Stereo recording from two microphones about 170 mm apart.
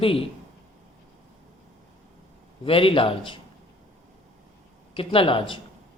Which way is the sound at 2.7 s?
30° left (ahead or behind).